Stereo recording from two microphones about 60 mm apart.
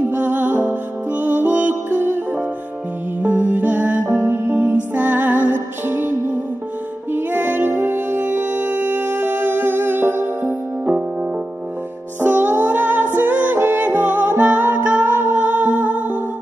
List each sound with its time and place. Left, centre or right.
0.1 s music: right
3.2 s music: right
12.2 s music: right